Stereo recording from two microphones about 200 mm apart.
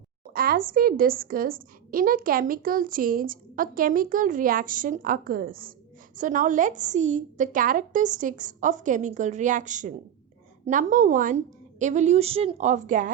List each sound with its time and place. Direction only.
0.3 s a woman's voice: 45° right (ahead or behind)